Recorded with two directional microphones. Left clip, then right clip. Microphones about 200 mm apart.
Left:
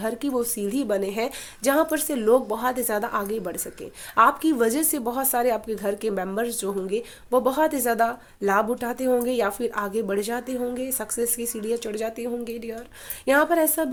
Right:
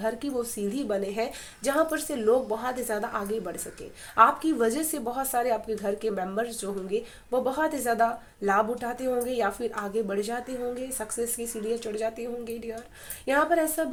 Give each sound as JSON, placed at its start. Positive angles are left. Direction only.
{"t": 0.0, "sound": "a woman's voice", "side_deg": 40}